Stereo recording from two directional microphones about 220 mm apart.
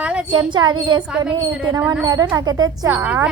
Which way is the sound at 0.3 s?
20° right (ahead or behind).